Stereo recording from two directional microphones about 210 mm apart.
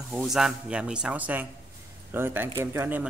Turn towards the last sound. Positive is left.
turn(degrees=-10)  # may be behind; listen again after turning